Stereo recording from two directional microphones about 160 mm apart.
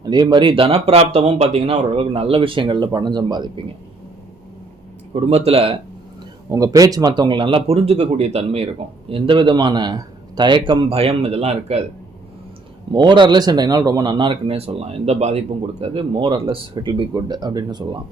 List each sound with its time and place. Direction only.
0.0 s speech: 25° right (ahead or behind)
5.1 s speech: 40° right (ahead or behind)
6.5 s speech: 20° right (ahead or behind); by 11.8 s 40° right (ahead or behind)
12.9 s speech: 25° right (ahead or behind)